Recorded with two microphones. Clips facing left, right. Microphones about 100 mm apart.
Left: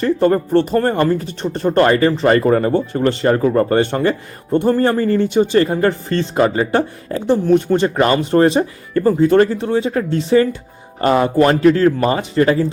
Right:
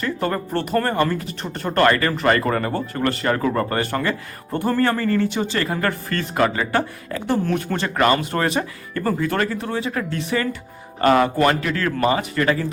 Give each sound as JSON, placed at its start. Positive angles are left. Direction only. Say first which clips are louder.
{"t": 0.0, "sound": "speech", "louder": "left 9 dB", "side_deg": 30}